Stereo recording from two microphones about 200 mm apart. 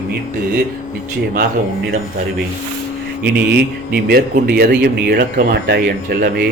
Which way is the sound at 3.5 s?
50° right (ahead or behind).